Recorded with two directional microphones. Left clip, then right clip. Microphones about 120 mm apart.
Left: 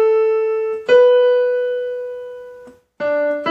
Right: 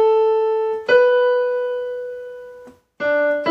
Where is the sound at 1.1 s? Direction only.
25° right (ahead or behind).